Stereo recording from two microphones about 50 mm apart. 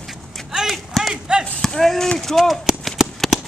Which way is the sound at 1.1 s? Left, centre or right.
Centre.